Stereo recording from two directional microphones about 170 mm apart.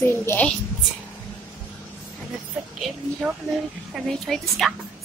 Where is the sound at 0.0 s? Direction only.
15° left (ahead or behind).